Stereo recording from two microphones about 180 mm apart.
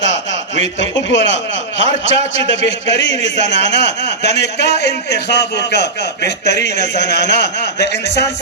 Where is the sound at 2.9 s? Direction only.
80° left.